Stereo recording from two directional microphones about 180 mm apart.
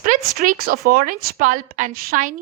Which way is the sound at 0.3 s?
55° right (ahead or behind).